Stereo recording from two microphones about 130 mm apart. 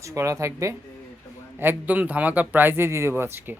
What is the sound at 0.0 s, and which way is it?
Speech, 25° right (ahead or behind).